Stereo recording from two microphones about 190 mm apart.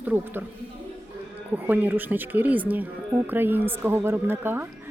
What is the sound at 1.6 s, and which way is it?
A woman's voice, 10° right (ahead or behind).